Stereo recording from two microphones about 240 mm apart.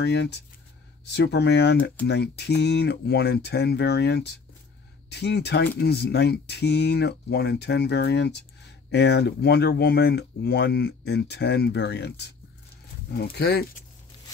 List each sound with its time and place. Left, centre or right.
0.0 s speech: left